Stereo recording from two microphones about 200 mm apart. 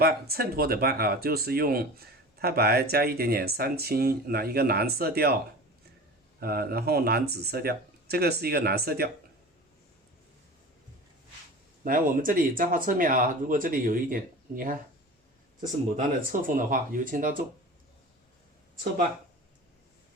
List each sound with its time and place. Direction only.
0.0 s speech: 50° right (ahead or behind)
6.4 s speech: 50° right (ahead or behind)
11.8 s speech: 45° right (ahead or behind)
16.3 s speech: 45° right (ahead or behind)